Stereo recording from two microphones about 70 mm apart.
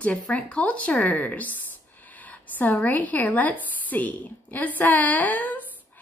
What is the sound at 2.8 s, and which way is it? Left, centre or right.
A woman's voice, left.